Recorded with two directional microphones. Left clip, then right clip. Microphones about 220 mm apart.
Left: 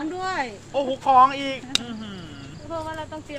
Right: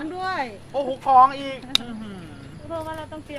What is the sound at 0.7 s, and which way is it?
Speech, 30° left (ahead or behind).